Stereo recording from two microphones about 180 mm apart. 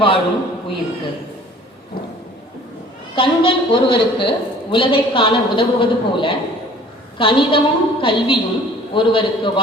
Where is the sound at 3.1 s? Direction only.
30° left (ahead or behind).